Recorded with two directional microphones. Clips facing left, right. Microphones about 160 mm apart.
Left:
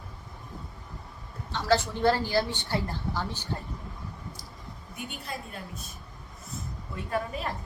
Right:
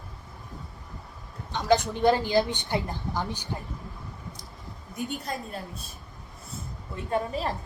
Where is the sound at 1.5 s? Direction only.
15° right (ahead or behind).